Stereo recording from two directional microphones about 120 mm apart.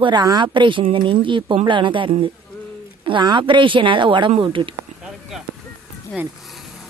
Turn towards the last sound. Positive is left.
turn(degrees=0)  # may be behind; listen again after turning